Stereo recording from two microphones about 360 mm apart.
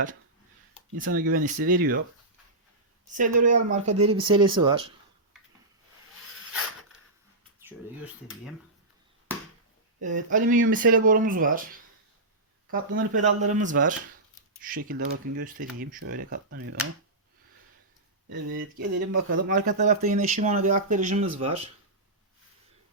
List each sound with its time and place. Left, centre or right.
0.9 s speech: right
3.1 s speech: right
10.0 s speech: right
18.3 s speech: right